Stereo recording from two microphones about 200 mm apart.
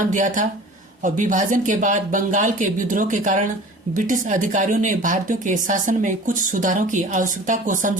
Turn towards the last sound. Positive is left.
turn(degrees=-40)  # may be behind; listen again after turning